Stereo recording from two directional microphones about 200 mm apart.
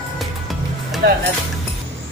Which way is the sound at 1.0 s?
55° right (ahead or behind).